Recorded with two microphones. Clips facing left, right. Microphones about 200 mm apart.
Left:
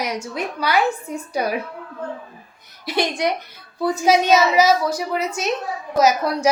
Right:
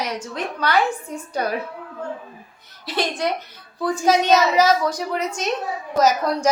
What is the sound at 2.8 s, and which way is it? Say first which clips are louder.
A woman's voice: left 2 dB; 10° left (ahead or behind).